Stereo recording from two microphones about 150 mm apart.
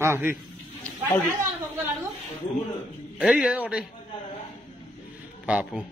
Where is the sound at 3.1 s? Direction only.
5° right (ahead or behind).